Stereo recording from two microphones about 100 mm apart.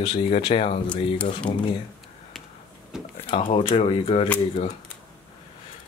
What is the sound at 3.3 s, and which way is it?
Speech, 65° left (ahead or behind).